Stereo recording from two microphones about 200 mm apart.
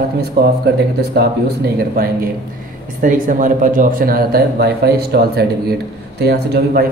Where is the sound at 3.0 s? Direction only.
40° right (ahead or behind).